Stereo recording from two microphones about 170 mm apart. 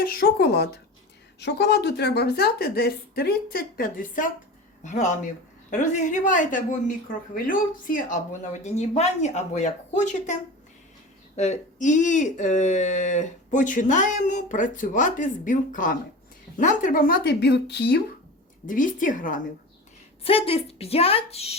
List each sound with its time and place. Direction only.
0.0 s a woman's voice: 60° left (ahead or behind)
1.4 s a woman's voice: 85° left; by 10.3 s 45° left (ahead or behind)
11.3 s a woman's voice: 40° left (ahead or behind); by 18.0 s 80° left
18.6 s speech: 50° left (ahead or behind)
20.2 s a woman's voice: 35° left (ahead or behind)